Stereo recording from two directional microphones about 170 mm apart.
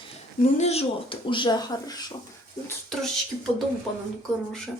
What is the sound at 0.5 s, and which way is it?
Speech, 40° left (ahead or behind).